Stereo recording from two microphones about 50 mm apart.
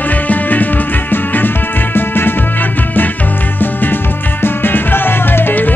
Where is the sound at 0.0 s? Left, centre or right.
Left.